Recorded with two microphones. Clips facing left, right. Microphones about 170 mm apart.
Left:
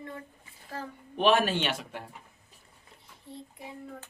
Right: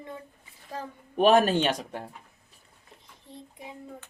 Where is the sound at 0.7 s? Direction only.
15° right (ahead or behind).